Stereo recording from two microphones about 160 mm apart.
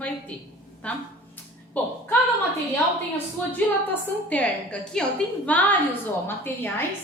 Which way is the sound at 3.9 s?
10° left (ahead or behind).